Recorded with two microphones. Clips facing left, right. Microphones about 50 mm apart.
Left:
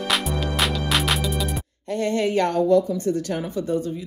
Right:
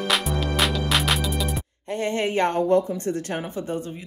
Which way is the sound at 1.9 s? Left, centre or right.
Right.